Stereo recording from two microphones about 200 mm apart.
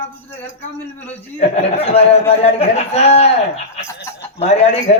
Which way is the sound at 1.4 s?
35° left (ahead or behind).